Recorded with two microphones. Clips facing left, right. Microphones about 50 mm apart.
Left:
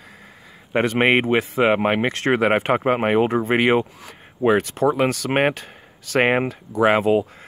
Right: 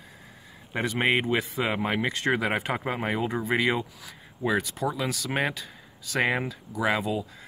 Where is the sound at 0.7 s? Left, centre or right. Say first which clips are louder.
Left 8 dB; left.